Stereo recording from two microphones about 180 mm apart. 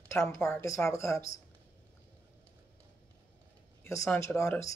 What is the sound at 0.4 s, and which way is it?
Speech, 5° left (ahead or behind).